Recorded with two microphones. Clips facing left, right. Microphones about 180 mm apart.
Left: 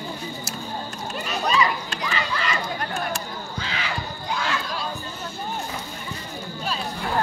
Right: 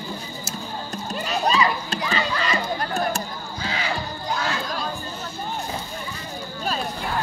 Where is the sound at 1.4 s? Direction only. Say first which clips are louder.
Right 1 dB; 30° right (ahead or behind).